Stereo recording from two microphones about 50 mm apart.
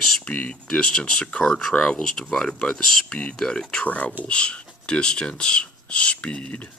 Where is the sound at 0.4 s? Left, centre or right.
Left.